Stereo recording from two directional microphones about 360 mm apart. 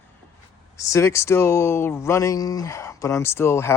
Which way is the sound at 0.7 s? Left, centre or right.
Centre.